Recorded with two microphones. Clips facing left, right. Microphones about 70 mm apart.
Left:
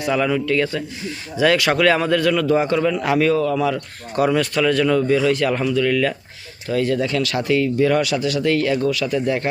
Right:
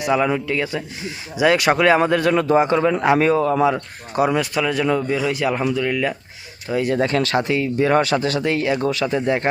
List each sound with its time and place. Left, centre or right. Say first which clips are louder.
0.0 s a man's voice: right 1 dB; centre
7.0 s speech: right 2 dB; right
8.4 s speech: left 1 dB; right